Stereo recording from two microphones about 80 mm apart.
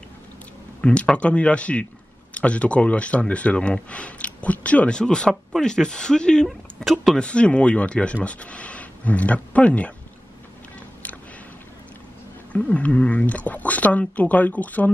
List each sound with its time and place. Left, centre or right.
0.7 s speech: centre
7.2 s speech: centre
12.5 s speech: centre